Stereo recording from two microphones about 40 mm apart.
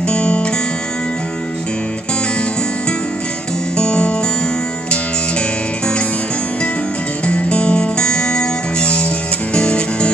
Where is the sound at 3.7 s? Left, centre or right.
Left.